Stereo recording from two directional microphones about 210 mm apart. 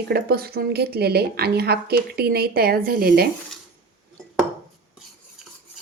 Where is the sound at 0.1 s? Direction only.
45° right (ahead or behind).